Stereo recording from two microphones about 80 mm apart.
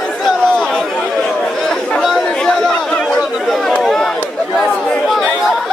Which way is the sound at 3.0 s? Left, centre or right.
Centre.